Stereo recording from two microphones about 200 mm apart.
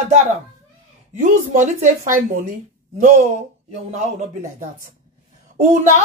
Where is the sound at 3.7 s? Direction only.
35° right (ahead or behind).